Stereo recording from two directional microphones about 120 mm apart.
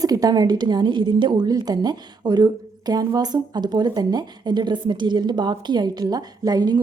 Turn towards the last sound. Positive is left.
turn(degrees=-35)  # may be behind; listen again after turning